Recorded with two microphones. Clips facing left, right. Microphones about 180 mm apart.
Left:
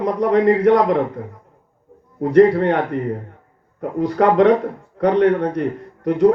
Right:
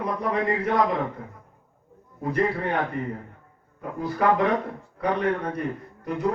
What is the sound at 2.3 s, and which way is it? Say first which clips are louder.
Speech: left 12 dB; 75° left (ahead or behind).